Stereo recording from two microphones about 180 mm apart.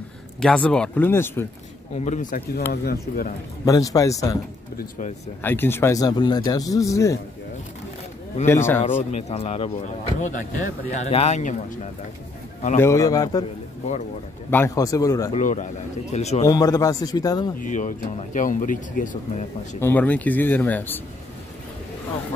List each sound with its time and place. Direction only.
0.4 s speech: 5° left (ahead or behind)
2.0 s speech: 40° left (ahead or behind)
2.7 s speech: 60° left (ahead or behind)
3.6 s a man's voice: 20° left (ahead or behind)
5.4 s speech: 10° left (ahead or behind)
8.5 s speech: 15° left (ahead or behind)
9.1 s speech: 35° left (ahead or behind)
10.2 s speech: 45° left (ahead or behind)
12.7 s a man's voice: 15° left (ahead or behind)
14.5 s a man's voice: 15° left (ahead or behind)
15.3 s speech: 40° left (ahead or behind)
16.4 s a man's voice: 20° left (ahead or behind)
17.6 s speech: 45° left (ahead or behind)
19.8 s speech: 10° left (ahead or behind)